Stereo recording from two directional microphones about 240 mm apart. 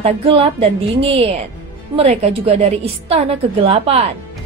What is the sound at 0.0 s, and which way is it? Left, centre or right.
A woman's voice, right.